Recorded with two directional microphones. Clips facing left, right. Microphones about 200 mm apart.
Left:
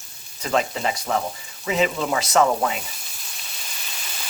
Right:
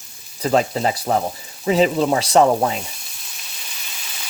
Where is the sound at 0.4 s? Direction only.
35° right (ahead or behind).